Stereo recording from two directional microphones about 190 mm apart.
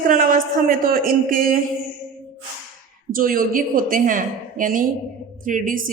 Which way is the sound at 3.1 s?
50° right (ahead or behind).